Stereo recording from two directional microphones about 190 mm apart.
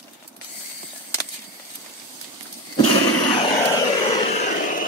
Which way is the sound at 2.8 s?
30° left (ahead or behind).